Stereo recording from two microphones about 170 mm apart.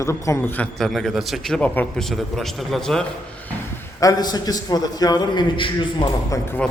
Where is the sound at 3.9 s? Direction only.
20° left (ahead or behind).